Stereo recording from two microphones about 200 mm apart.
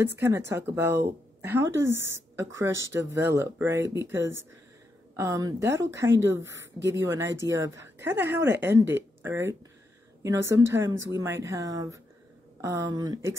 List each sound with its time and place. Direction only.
0.0 s speech: 10° right (ahead or behind)
5.1 s speech: 15° right (ahead or behind)